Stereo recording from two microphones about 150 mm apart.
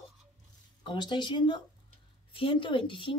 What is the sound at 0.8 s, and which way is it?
A woman's voice, 30° left (ahead or behind).